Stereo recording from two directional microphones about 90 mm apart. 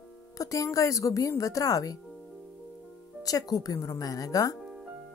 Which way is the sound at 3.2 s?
45° left (ahead or behind).